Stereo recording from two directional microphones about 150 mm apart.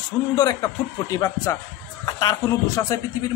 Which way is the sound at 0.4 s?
25° left (ahead or behind).